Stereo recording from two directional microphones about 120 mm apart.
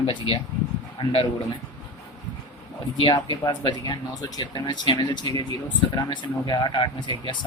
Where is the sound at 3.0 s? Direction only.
35° left (ahead or behind).